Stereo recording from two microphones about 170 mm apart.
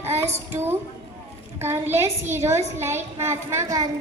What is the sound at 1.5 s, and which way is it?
A woman's voice, 15° right (ahead or behind).